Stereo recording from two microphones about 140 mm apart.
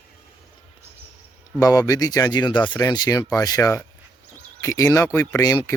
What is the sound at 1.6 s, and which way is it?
Speech, 25° left (ahead or behind).